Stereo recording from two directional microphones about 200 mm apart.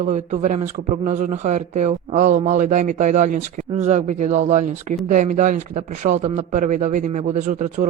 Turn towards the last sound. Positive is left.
turn(degrees=-40)  # may be behind; listen again after turning